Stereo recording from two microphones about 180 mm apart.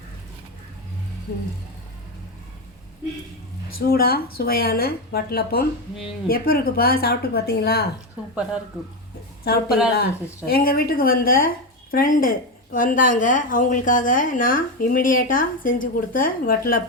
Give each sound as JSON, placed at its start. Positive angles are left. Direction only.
{"t": 3.7, "sound": "speech", "side_deg": 55}
{"t": 9.4, "sound": "speech", "side_deg": 60}